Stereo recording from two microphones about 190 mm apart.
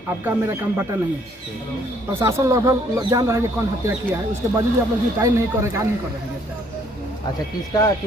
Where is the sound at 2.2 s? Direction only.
15° right (ahead or behind).